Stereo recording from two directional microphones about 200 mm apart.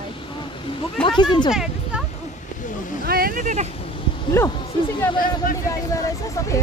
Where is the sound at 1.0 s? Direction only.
5° left (ahead or behind).